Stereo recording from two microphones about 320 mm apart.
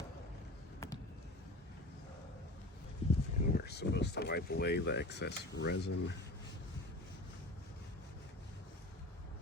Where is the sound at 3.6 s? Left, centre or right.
Left.